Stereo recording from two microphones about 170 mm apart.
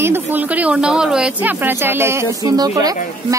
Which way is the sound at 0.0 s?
10° right (ahead or behind).